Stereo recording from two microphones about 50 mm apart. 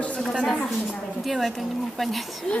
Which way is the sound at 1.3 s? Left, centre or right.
Centre.